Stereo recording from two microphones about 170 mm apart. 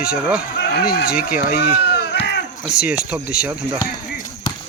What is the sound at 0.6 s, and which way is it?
Speech, 70° left (ahead or behind).